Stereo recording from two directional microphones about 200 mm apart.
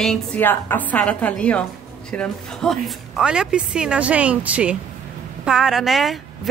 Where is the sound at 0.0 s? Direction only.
5° left (ahead or behind).